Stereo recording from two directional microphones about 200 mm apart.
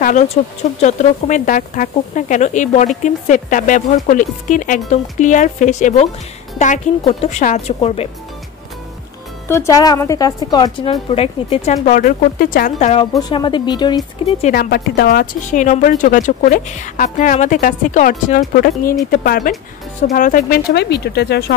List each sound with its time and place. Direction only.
0.0 s speech: 35° left (ahead or behind)
9.5 s a woman's voice: 15° left (ahead or behind); by 13.0 s 35° left (ahead or behind)
13.3 s a woman's voice: 20° left (ahead or behind)
14.4 s speech: 50° left (ahead or behind)